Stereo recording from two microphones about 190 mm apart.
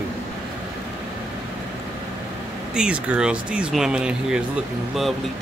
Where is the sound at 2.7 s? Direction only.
5° right (ahead or behind).